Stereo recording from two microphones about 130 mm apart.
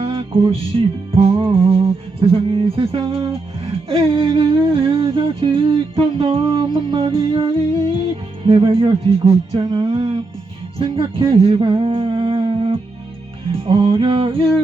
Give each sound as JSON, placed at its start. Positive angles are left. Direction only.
{"t": 0.0, "sound": "music", "side_deg": -45}
{"t": 1.1, "sound": "humming", "side_deg": -45}
{"t": 8.4, "sound": "humming", "side_deg": -45}